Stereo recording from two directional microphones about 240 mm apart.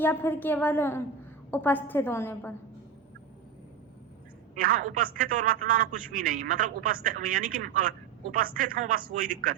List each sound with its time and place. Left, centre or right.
0.0 s a woman's voice: centre
4.5 s a man's voice: right